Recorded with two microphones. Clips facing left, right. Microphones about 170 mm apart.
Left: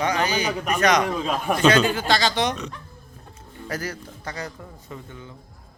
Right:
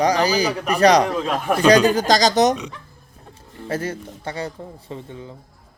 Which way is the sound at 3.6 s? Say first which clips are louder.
Right 5 dB; 25° right (ahead or behind).